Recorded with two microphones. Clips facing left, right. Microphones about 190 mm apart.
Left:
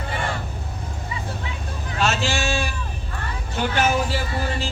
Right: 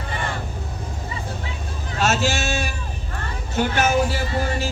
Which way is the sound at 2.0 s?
45° right (ahead or behind).